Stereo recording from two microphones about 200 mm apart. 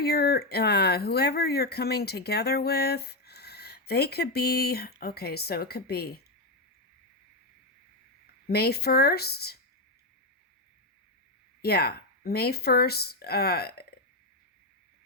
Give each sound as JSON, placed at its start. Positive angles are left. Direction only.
{"t": 0.0, "sound": "speech", "side_deg": 50}
{"t": 8.4, "sound": "speech", "side_deg": 50}
{"t": 11.6, "sound": "speech", "side_deg": 50}